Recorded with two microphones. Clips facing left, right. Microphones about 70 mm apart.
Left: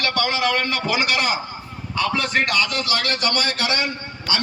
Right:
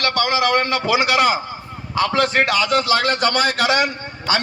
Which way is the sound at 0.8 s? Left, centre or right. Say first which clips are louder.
Right 6 dB; right.